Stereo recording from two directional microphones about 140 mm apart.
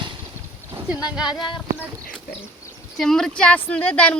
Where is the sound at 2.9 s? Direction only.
Centre (ahead or behind).